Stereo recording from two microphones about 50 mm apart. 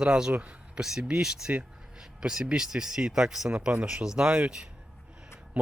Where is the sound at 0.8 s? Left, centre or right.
Centre.